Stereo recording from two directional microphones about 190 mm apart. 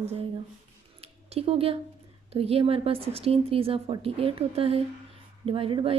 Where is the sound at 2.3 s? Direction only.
30° right (ahead or behind).